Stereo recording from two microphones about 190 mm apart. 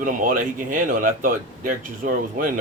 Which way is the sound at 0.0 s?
45° right (ahead or behind).